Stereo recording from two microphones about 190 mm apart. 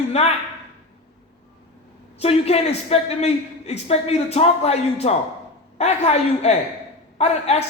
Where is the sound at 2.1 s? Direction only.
30° left (ahead or behind).